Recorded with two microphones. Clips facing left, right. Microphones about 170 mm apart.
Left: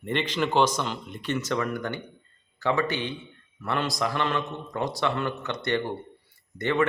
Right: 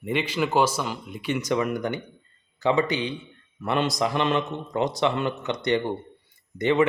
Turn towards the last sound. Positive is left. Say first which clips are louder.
# right 4 dB
turn(degrees=-15)  # may be behind; listen again after turning